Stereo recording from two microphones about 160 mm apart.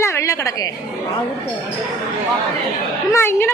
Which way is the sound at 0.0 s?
20° left (ahead or behind).